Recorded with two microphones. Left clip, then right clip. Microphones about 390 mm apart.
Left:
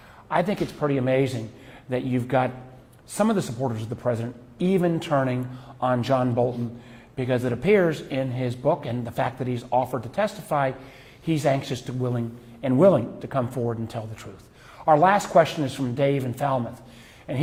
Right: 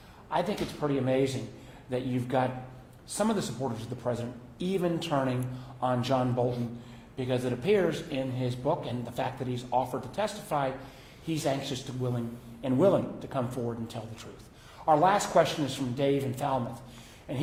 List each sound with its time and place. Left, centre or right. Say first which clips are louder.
0.3 s a man's voice: left 6 dB; left